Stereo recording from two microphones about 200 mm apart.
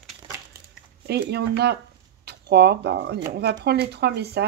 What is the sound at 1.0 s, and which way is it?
Speech, 55° right (ahead or behind).